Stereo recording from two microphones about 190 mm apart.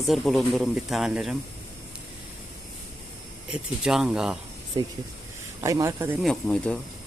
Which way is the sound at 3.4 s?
5° right (ahead or behind).